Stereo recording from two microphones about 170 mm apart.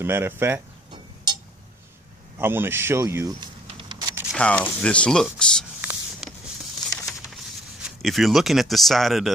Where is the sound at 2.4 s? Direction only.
15° right (ahead or behind).